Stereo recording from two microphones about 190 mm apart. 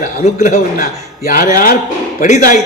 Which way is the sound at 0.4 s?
40° left (ahead or behind).